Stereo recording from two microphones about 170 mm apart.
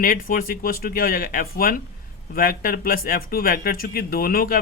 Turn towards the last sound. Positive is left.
turn(degrees=60)  # may be behind; listen again after turning